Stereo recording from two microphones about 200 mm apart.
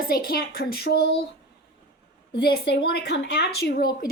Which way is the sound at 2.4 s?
55° left (ahead or behind).